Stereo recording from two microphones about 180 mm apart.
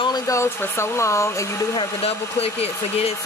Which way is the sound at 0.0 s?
20° left (ahead or behind).